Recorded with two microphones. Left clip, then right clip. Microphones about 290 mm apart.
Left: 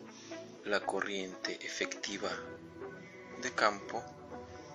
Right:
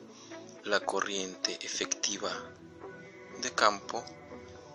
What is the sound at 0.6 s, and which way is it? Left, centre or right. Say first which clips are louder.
Speech: right 4 dB; centre.